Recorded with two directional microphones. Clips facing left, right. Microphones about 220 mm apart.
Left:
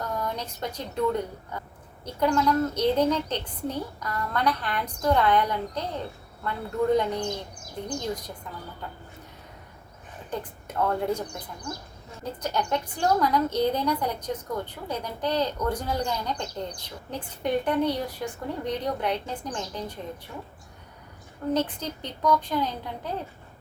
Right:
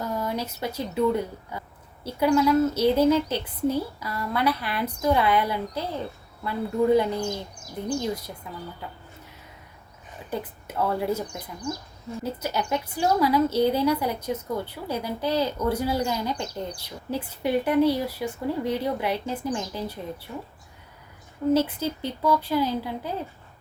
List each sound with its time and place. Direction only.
0.0 s a woman's voice: 10° right (ahead or behind)
8.4 s a woman's voice: 10° right (ahead or behind)
10.2 s a woman's voice: 5° right (ahead or behind)
12.2 s a woman's voice: 5° right (ahead or behind)
21.5 s a woman's voice: 5° right (ahead or behind)